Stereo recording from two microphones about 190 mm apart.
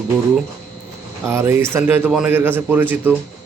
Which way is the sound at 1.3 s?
15° right (ahead or behind).